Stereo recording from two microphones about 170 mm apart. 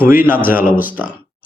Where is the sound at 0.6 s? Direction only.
55° left (ahead or behind).